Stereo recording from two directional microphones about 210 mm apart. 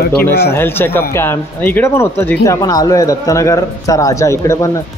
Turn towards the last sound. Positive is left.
turn(degrees=15)  # may be behind; listen again after turning